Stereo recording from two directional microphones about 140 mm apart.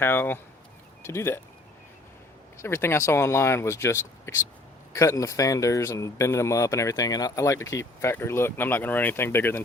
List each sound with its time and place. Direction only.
0.0 s speech: 15° left (ahead or behind)
2.6 s speech: 20° left (ahead or behind)